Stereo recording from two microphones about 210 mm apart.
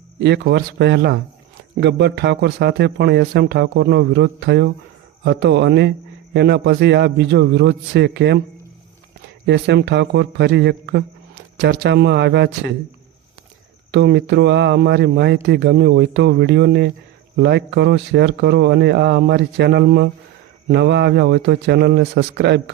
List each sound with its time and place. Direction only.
0.2 s a man's voice: 55° right (ahead or behind)
9.5 s a man's voice: 55° right (ahead or behind)
13.9 s a man's voice: 55° right (ahead or behind)